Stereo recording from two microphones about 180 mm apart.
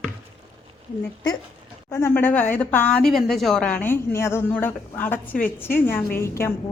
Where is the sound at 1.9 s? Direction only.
15° left (ahead or behind).